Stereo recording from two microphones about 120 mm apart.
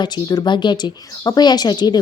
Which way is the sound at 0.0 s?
35° left (ahead or behind).